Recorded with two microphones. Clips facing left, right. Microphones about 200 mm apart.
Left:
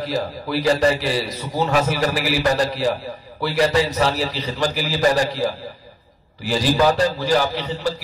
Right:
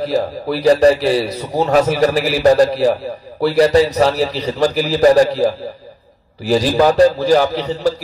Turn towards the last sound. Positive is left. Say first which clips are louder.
# right 5 dB
turn(degrees=-40)  # may be behind; listen again after turning